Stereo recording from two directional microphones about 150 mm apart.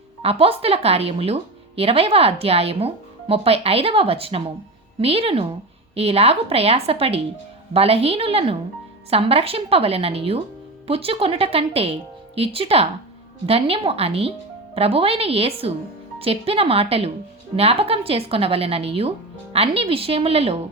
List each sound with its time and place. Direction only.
0.2 s a woman's voice: 40° right (ahead or behind)